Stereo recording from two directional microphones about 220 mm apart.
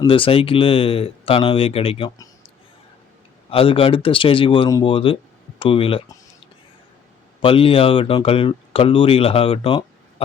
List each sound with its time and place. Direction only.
0.0 s speech: 25° left (ahead or behind)
3.5 s speech: 25° left (ahead or behind)
7.4 s speech: 25° left (ahead or behind)